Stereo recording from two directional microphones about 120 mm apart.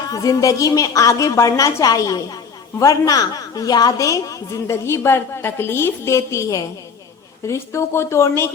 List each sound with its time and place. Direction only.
0.1 s a woman's voice: 30° left (ahead or behind)